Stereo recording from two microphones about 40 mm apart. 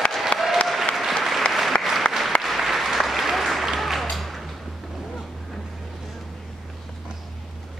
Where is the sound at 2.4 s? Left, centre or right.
Centre.